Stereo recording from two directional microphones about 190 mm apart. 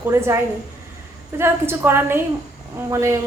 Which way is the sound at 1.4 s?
10° right (ahead or behind).